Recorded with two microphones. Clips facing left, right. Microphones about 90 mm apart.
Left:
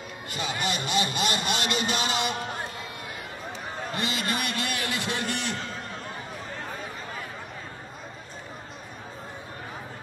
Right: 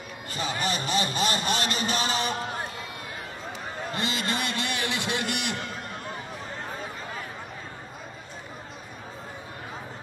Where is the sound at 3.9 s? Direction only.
30° right (ahead or behind).